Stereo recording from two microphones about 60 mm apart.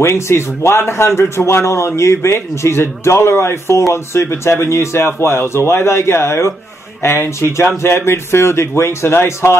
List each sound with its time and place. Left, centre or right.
0.0 s a man's voice: left